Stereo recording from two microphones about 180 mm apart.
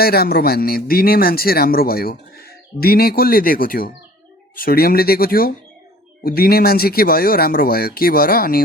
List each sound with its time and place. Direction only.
0.0 s speech: 60° left (ahead or behind)